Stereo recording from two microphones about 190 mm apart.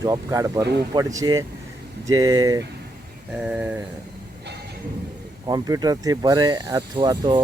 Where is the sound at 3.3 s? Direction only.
5° right (ahead or behind).